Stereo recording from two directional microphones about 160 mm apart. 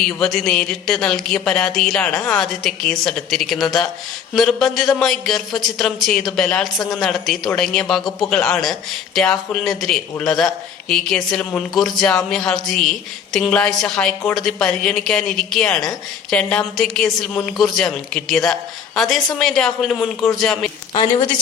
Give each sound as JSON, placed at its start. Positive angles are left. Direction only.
{"t": 0.2, "sound": "speech", "side_deg": 5}
{"t": 20.9, "sound": "a woman's voice", "side_deg": 30}